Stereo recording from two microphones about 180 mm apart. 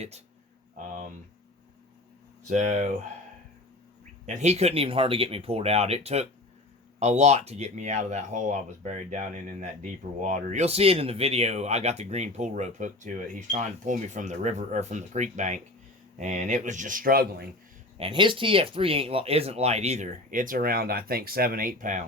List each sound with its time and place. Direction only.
2.5 s speech: 40° right (ahead or behind)
4.4 s speech: 40° right (ahead or behind); by 17.4 s 55° right (ahead or behind)
17.9 s speech: 30° right (ahead or behind); by 22.0 s 45° right (ahead or behind)